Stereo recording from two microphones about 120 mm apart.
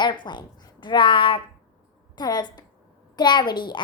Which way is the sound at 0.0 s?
40° left (ahead or behind).